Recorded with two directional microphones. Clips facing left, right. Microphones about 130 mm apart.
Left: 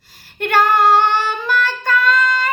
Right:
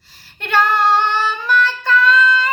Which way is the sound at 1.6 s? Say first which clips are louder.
Right 1 dB; 45° left (ahead or behind).